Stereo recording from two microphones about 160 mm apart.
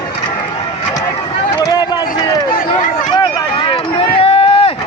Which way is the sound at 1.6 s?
25° left (ahead or behind).